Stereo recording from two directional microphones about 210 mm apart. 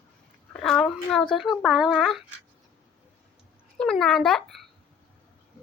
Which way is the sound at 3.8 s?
5° left (ahead or behind).